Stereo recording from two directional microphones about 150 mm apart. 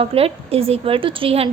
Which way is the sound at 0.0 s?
40° right (ahead or behind).